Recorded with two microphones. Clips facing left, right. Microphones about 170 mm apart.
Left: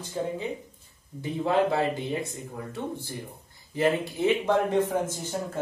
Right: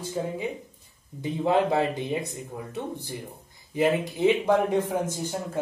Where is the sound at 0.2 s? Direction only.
5° right (ahead or behind).